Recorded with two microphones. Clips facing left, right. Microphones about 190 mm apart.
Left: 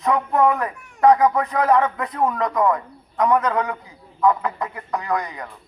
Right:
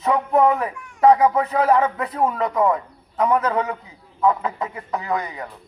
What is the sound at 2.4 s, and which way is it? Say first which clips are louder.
A man's voice: even; 10° right (ahead or behind).